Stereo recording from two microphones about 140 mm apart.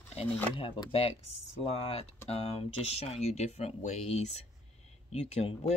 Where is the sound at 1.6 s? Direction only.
45° left (ahead or behind).